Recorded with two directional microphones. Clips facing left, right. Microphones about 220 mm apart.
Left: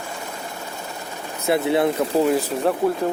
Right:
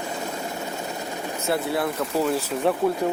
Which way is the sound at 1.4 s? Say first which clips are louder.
Left 6 dB; 20° left (ahead or behind).